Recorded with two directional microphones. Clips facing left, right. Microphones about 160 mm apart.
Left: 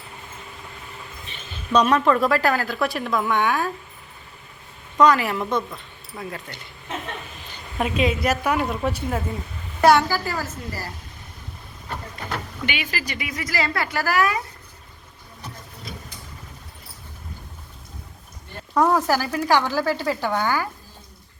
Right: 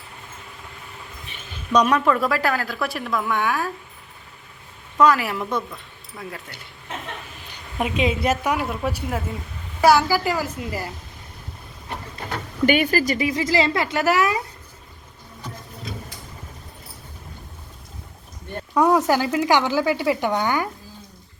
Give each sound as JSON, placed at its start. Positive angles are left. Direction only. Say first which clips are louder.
{"t": 1.3, "sound": "speech", "louder": "even", "side_deg": -10}
{"t": 4.9, "sound": "speech", "louder": "left 1 dB", "side_deg": -5}
{"t": 7.8, "sound": "a woman's voice", "louder": "even", "side_deg": -15}
{"t": 8.4, "sound": "a woman's voice", "louder": "left 1 dB", "side_deg": -5}
{"t": 12.3, "sound": "a sound", "louder": "right 10 dB", "side_deg": -45}
{"t": 13.1, "sound": "a woman's voice", "louder": "right 7 dB", "side_deg": -30}
{"t": 18.7, "sound": "a woman's voice", "louder": "right 2 dB", "side_deg": -10}